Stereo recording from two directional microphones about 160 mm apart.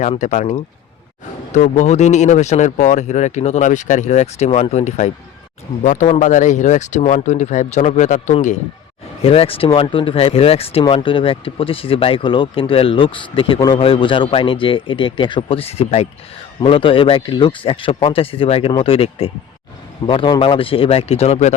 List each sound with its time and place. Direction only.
0.0 s speech: 50° left (ahead or behind)
9.2 s speech: 35° left (ahead or behind)